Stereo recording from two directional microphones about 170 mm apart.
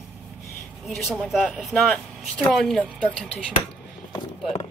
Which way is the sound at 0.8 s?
Centre (ahead or behind).